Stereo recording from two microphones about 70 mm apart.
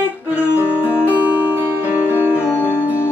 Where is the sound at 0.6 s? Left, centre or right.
Right.